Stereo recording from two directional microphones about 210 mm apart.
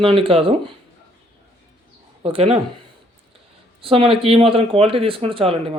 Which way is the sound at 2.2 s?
30° right (ahead or behind).